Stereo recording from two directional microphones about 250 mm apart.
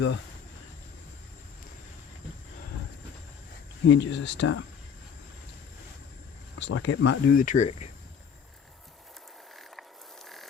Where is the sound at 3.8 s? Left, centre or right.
Left.